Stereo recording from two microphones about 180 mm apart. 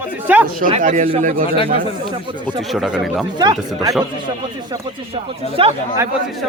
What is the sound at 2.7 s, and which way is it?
Speech, centre (ahead or behind).